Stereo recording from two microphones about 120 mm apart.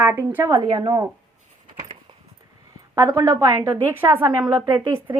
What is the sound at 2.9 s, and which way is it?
Speech, 30° right (ahead or behind).